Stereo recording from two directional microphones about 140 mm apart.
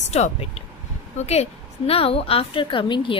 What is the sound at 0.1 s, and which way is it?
Speech, 50° left (ahead or behind).